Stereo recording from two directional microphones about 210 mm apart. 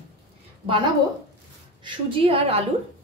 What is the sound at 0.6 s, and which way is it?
A woman's voice, 25° right (ahead or behind).